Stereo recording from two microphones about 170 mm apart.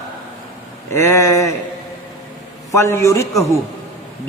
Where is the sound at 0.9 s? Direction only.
15° left (ahead or behind).